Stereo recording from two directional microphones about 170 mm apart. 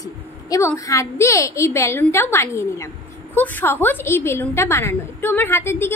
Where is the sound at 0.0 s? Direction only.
20° left (ahead or behind).